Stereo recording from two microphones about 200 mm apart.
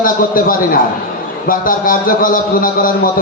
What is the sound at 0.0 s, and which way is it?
A man's voice, 45° left (ahead or behind).